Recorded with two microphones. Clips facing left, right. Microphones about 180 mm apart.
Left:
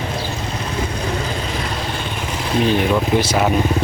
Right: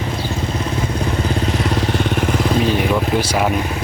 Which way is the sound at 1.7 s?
70° right (ahead or behind).